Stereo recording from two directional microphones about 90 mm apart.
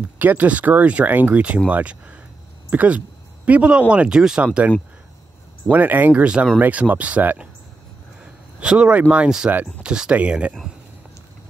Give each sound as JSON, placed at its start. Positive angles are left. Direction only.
{"t": 0.2, "sound": "speech", "side_deg": -20}
{"t": 5.7, "sound": "speech", "side_deg": -20}
{"t": 8.5, "sound": "speech", "side_deg": -10}